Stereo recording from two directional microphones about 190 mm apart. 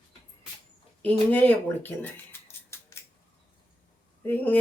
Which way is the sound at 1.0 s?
10° left (ahead or behind).